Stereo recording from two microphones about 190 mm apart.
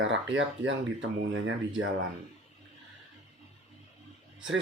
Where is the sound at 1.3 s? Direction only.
90° right.